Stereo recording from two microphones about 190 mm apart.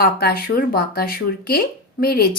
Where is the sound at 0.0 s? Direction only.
55° left (ahead or behind).